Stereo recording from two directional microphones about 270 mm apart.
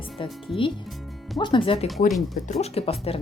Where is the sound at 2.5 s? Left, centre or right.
Left.